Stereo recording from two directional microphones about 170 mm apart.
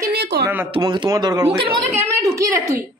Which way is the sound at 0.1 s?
80° right.